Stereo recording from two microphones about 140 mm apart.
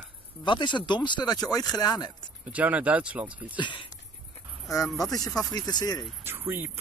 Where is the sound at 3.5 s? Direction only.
35° left (ahead or behind).